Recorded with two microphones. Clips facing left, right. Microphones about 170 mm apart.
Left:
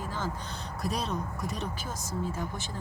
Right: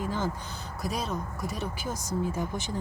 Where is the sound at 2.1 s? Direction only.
15° right (ahead or behind).